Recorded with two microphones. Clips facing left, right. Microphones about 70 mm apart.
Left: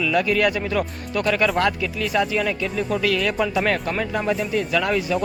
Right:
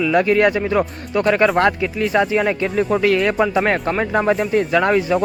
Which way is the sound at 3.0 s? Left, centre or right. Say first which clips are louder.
Right 4 dB; right.